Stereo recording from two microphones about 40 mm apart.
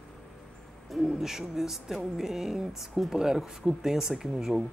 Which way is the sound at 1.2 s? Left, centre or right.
Centre.